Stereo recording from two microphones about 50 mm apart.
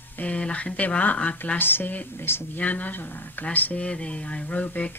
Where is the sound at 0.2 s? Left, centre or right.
Left.